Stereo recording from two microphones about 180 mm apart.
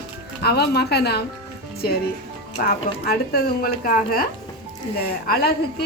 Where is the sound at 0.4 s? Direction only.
65° left (ahead or behind).